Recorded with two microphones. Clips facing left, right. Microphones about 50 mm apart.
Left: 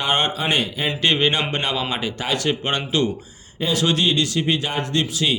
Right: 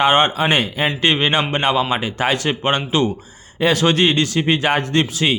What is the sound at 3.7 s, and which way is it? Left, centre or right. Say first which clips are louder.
A man's voice: right 1 dB; right.